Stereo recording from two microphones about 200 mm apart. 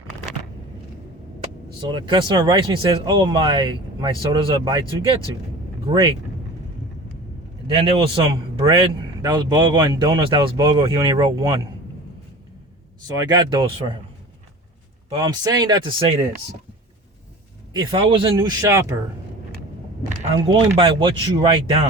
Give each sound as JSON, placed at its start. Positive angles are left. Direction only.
{"t": 1.8, "sound": "a man's voice", "side_deg": -25}
{"t": 7.8, "sound": "a man's voice", "side_deg": -30}
{"t": 13.1, "sound": "a man's voice", "side_deg": -20}
{"t": 15.1, "sound": "a man's voice", "side_deg": -20}
{"t": 17.7, "sound": "a man's voice", "side_deg": -25}
{"t": 20.7, "sound": "a man's voice", "side_deg": -25}